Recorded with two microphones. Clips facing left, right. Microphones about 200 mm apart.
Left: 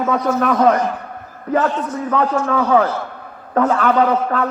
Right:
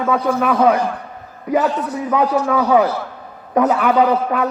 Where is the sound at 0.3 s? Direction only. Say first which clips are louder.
Even; 10° right (ahead or behind).